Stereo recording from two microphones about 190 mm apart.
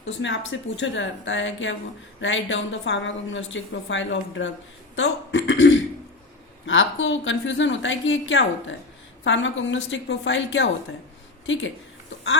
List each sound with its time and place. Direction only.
0.0 s a woman's voice: 75° left (ahead or behind)
6.7 s a woman's voice: 85° left